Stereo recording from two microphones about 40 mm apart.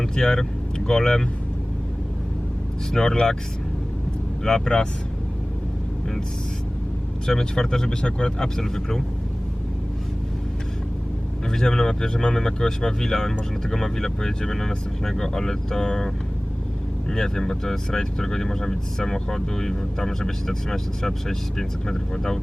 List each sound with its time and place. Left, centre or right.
0.0 s speech: centre
2.9 s speech: centre
4.4 s speech: centre
7.3 s speech: centre
11.4 s speech: centre